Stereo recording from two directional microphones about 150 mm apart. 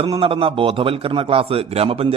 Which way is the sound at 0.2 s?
35° right (ahead or behind).